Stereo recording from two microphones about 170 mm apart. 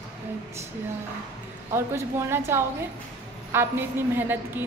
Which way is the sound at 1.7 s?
15° right (ahead or behind).